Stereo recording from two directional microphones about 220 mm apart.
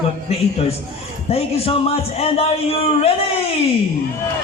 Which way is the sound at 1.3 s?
25° left (ahead or behind).